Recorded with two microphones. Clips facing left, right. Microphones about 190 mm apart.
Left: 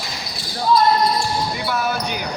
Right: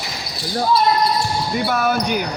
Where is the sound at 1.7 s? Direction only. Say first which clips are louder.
Right 4 dB; 50° right (ahead or behind).